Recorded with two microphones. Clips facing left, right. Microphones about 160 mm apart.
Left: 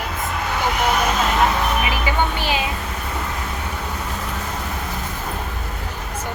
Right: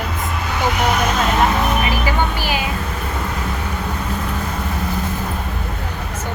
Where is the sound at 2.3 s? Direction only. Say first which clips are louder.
Even; 25° left (ahead or behind).